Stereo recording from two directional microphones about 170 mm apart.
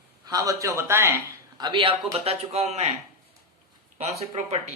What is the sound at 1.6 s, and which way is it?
A man's voice, 25° right (ahead or behind).